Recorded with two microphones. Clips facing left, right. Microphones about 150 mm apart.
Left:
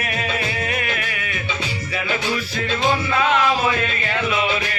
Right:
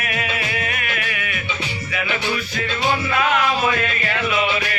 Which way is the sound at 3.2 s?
25° left (ahead or behind).